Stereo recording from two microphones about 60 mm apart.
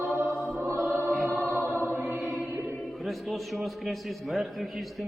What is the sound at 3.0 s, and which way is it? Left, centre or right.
A man's voice, centre.